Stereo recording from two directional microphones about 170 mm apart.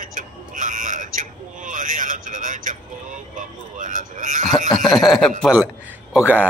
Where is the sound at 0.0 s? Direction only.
50° right (ahead or behind).